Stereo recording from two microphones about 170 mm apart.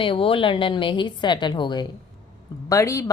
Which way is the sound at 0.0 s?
30° left (ahead or behind).